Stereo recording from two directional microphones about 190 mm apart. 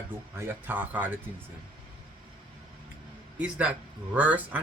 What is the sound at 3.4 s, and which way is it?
Speech, 5° right (ahead or behind).